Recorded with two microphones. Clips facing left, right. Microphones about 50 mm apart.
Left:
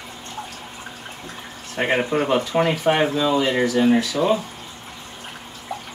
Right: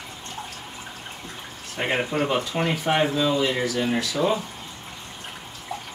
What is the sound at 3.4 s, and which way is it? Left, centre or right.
Speech, left.